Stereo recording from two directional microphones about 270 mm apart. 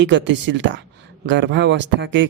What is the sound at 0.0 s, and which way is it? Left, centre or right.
Speech, right.